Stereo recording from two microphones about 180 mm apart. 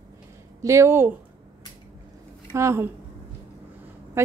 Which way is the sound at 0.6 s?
15° right (ahead or behind).